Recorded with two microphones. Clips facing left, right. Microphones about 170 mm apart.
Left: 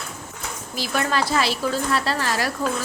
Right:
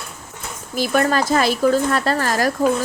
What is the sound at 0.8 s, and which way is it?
A woman's voice, 50° right (ahead or behind).